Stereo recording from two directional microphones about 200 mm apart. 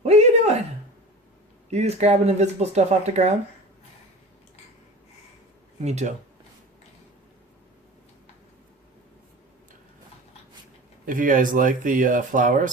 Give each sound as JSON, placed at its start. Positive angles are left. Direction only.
{"t": 0.0, "sound": "a sound", "side_deg": -35}
{"t": 1.7, "sound": "speech", "side_deg": -35}
{"t": 5.8, "sound": "speech", "side_deg": -35}
{"t": 11.0, "sound": "speech", "side_deg": -40}